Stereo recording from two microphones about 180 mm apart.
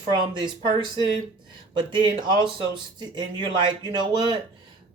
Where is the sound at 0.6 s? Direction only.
25° right (ahead or behind).